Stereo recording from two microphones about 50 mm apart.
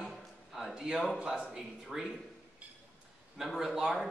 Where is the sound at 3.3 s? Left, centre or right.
Centre.